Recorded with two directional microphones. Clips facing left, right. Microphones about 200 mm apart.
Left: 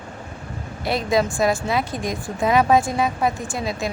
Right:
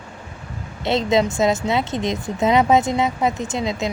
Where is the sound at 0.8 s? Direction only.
25° right (ahead or behind).